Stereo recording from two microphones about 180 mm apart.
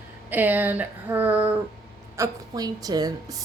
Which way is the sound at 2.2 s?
20° right (ahead or behind).